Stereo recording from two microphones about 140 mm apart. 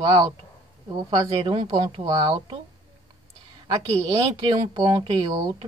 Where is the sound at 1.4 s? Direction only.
40° right (ahead or behind).